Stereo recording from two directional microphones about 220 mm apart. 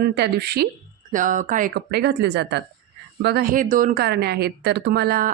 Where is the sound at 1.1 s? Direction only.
35° right (ahead or behind).